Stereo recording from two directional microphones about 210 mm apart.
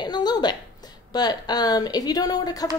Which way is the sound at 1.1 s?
20° left (ahead or behind).